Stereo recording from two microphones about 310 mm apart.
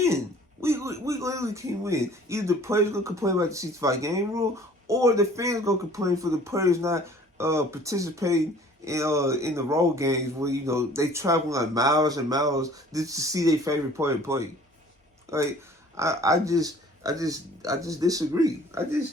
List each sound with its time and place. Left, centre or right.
0.6 s speech: centre
16.0 s speech: centre